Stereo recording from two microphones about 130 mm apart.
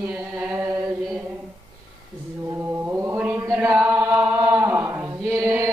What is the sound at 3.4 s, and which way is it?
Chant, 25° right (ahead or behind).